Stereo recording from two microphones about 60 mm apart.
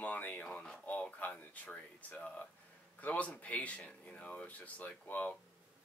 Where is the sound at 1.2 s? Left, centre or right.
Left.